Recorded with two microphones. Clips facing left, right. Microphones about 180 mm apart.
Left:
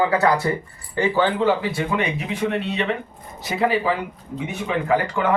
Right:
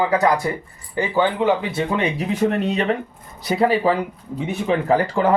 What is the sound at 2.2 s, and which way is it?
Speech, 40° right (ahead or behind).